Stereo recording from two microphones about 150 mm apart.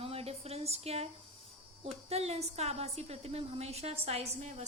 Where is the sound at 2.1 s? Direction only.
45° right (ahead or behind).